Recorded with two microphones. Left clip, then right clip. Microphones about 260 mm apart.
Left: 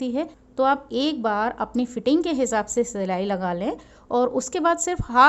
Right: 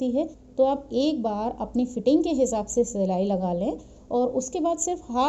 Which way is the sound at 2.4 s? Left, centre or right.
Centre.